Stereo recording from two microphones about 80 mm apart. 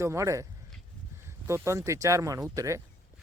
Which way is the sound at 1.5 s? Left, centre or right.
Right.